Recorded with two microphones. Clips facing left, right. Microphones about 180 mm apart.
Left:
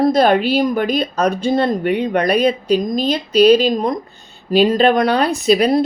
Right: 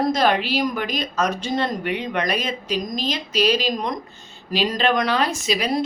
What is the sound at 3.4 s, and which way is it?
A woman's voice, 55° left (ahead or behind).